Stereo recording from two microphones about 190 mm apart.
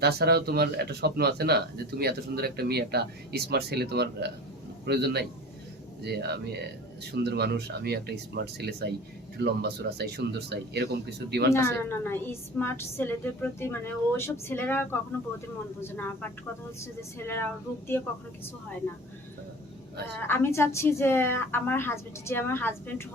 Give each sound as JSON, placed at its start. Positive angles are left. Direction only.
{"t": 0.0, "sound": "speech", "side_deg": -55}
{"t": 11.5, "sound": "a woman's voice", "side_deg": 10}
{"t": 20.2, "sound": "a woman's voice", "side_deg": 10}